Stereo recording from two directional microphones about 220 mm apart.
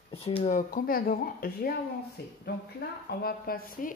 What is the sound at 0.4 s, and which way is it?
Speech, 35° left (ahead or behind).